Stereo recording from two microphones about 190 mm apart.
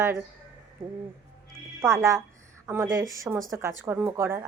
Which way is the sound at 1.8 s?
15° right (ahead or behind).